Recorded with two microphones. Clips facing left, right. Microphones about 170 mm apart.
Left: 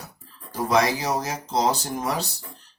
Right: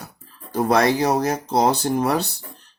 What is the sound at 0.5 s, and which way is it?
Speech, 60° right (ahead or behind).